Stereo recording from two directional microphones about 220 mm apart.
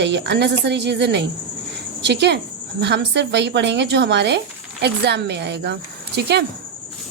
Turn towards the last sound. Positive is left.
turn(degrees=-50)  # may be behind; listen again after turning